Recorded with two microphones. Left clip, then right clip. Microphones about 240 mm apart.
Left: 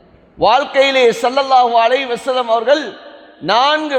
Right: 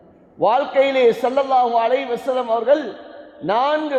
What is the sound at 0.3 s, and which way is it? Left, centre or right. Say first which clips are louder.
A man's voice: left 4 dB; left.